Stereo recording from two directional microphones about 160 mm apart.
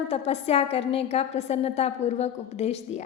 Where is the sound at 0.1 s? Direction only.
40° left (ahead or behind).